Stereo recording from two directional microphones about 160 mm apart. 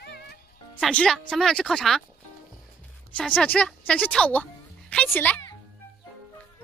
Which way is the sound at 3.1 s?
10° left (ahead or behind).